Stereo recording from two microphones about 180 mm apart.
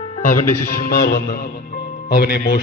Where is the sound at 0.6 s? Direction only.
55° left (ahead or behind).